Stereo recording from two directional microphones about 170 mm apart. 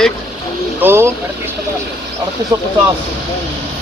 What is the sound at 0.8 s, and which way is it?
Speech, 15° right (ahead or behind).